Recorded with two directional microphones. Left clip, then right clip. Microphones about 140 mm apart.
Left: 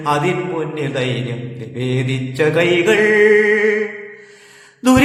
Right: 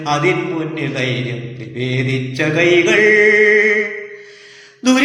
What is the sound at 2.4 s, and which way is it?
Speech, 40° left (ahead or behind).